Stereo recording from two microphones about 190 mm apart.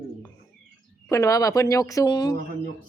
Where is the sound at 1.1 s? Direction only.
15° left (ahead or behind).